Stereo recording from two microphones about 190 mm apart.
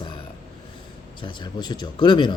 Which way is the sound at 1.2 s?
25° left (ahead or behind).